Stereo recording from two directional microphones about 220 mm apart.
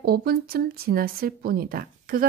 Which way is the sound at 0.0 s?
45° right (ahead or behind).